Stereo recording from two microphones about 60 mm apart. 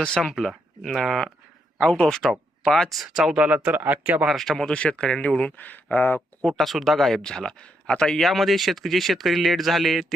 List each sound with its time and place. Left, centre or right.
0.0 s speech: centre
0.3 s speech: centre
3.2 s speech: centre
3.4 s speech: right
4.4 s speech: centre
4.7 s speech: centre
5.5 s speech: left
6.5 s speech: centre
8.2 s speech: centre